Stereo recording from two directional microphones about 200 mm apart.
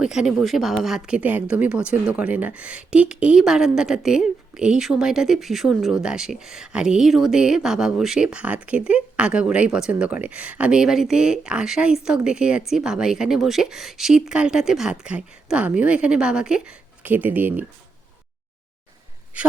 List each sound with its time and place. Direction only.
0.0 s speech: 5° right (ahead or behind)